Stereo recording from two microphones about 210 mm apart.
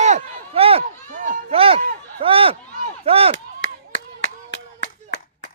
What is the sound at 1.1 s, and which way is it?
Run, 40° right (ahead or behind).